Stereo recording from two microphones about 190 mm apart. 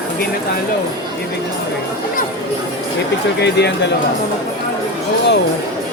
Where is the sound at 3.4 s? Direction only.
65° left (ahead or behind).